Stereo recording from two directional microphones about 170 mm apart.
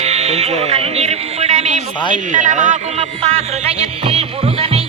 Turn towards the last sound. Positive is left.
turn(degrees=-40)  # may be behind; listen again after turning